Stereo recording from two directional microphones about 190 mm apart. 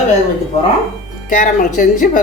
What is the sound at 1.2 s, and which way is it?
Speech, 45° left (ahead or behind).